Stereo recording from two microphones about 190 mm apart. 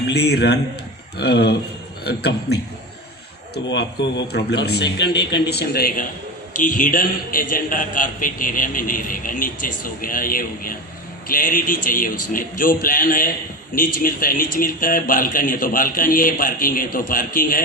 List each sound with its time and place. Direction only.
0.1 s a man's voice: 60° left (ahead or behind)